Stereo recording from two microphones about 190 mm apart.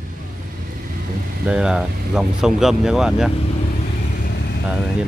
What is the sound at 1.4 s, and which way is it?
Speech, 5° right (ahead or behind).